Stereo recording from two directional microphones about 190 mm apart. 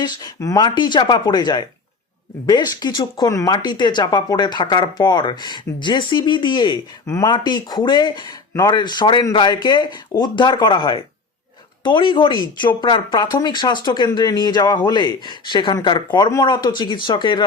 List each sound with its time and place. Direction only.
0.0 s speech: 20° left (ahead or behind)